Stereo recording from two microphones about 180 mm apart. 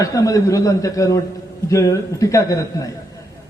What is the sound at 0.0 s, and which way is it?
A man's voice, 20° left (ahead or behind).